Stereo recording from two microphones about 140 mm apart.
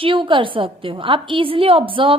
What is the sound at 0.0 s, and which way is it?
A woman's voice, 35° right (ahead or behind).